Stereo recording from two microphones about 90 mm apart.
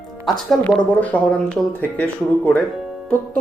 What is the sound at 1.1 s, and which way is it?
Speech, 20° left (ahead or behind).